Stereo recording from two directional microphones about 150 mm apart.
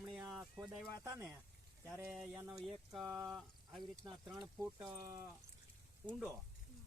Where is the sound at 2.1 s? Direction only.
5° right (ahead or behind).